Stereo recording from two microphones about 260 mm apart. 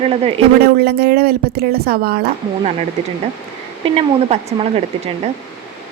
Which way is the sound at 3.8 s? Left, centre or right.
Right.